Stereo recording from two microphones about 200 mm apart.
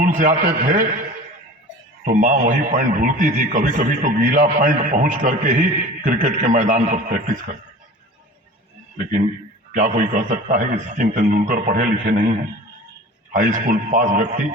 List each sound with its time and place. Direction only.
0.0 s a man's voice: 40° right (ahead or behind)
2.0 s a man's voice: 40° right (ahead or behind)
9.7 s a man's voice: 40° right (ahead or behind)